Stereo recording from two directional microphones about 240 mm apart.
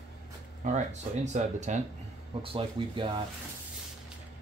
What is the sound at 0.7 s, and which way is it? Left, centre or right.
Speech, right.